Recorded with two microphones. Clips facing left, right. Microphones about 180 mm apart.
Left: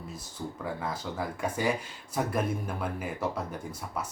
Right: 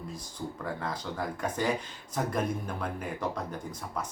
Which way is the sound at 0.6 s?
10° left (ahead or behind).